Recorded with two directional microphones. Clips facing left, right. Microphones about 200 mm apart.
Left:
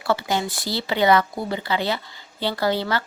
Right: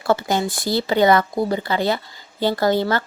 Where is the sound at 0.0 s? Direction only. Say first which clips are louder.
Right 3 dB; 45° right (ahead or behind).